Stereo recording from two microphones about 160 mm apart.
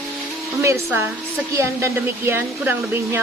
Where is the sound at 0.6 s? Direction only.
15° right (ahead or behind).